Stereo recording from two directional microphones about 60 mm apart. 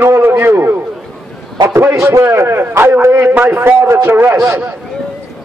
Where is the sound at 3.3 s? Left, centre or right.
Right.